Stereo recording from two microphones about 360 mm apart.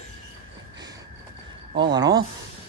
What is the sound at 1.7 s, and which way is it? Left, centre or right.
Speech, centre.